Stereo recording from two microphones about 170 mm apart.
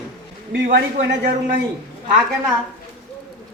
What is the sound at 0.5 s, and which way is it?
Speech, 90° right.